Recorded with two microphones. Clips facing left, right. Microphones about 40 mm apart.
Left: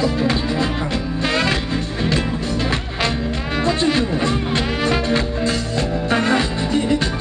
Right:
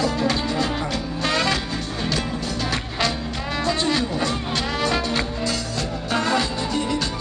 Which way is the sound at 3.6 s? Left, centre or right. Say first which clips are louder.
Left 4 dB; left.